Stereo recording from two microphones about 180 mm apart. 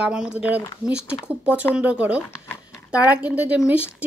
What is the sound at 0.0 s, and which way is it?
Speech, 5° right (ahead or behind).